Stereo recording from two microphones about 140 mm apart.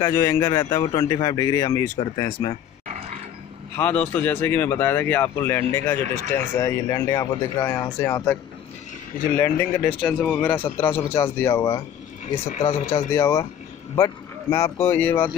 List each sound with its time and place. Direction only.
0.0 s speech: 20° left (ahead or behind)
3.7 s speech: 10° left (ahead or behind)
9.4 s speech: 20° left (ahead or behind)